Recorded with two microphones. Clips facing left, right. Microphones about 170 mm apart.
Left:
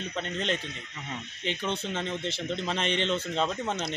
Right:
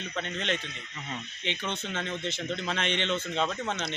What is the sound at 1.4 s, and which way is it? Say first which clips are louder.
Speech: left 2 dB; 40° left (ahead or behind).